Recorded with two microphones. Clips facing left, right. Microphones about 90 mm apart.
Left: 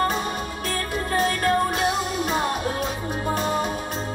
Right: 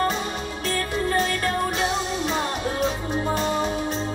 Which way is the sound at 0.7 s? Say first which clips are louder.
Right 3 dB; 45° left (ahead or behind).